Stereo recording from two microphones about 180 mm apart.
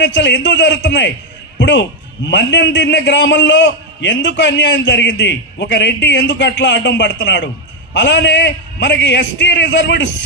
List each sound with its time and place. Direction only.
0.0 s a man's voice: 80° left